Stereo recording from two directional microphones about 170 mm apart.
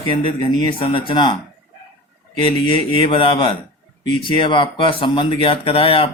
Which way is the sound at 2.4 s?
30° left (ahead or behind).